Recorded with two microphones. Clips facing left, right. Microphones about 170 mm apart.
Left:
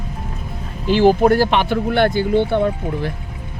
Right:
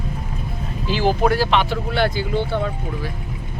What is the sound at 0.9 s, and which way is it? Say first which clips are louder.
Speech: left 6 dB; 55° left (ahead or behind).